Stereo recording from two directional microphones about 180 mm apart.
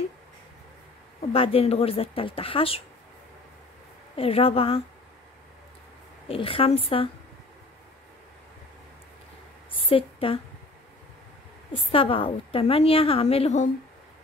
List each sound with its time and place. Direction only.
1.3 s a woman's voice: 30° left (ahead or behind)
4.2 s a woman's voice: 30° left (ahead or behind)
6.2 s a woman's voice: 30° left (ahead or behind)
9.8 s a woman's voice: 30° left (ahead or behind)
11.9 s a woman's voice: 30° left (ahead or behind)